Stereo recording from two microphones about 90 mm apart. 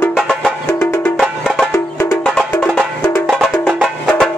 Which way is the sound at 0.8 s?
25° left (ahead or behind).